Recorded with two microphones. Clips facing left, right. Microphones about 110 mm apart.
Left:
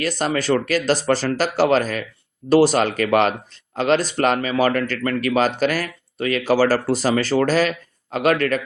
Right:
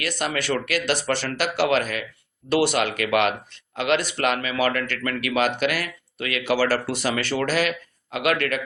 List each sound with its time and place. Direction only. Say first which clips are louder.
0.0 s speech: left 5 dB; 40° left (ahead or behind)